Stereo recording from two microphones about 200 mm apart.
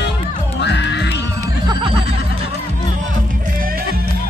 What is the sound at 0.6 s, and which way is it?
Music, 60° left (ahead or behind).